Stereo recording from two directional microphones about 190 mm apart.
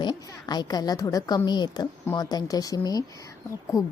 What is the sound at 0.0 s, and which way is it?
A woman's voice, 20° left (ahead or behind).